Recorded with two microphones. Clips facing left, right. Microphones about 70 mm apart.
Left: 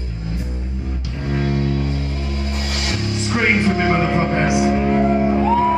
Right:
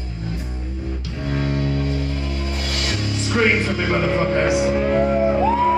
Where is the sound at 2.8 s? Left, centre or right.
Left.